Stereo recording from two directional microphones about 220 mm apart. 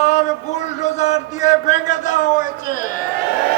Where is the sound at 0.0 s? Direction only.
35° left (ahead or behind).